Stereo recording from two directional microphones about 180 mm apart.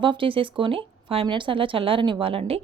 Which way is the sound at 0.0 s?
30° right (ahead or behind).